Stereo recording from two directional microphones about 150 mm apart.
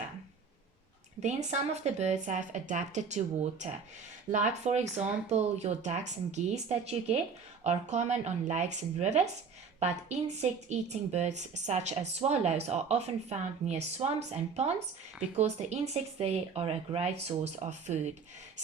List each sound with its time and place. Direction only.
1.2 s a woman's voice: 50° right (ahead or behind)